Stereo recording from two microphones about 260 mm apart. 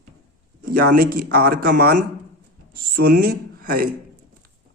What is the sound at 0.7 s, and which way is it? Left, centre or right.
A man's voice, right.